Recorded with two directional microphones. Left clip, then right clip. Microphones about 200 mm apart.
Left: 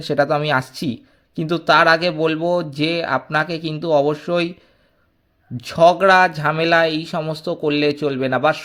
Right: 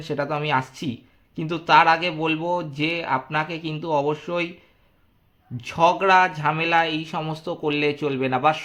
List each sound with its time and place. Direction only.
0.0 s speech: 30° left (ahead or behind)
5.5 s speech: 25° left (ahead or behind)